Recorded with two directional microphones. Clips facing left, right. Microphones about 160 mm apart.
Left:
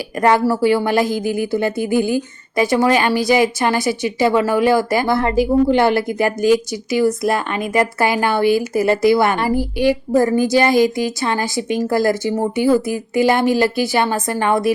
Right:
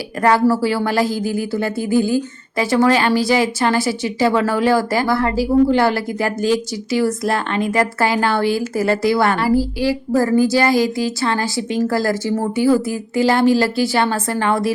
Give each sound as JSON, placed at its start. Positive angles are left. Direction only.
{"t": 0.2, "sound": "a woman's voice", "side_deg": 15}